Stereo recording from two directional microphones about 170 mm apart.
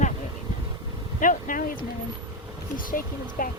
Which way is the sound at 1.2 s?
50° left (ahead or behind).